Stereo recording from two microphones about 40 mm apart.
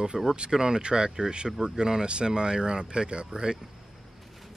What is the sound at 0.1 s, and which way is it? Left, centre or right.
Speech, centre.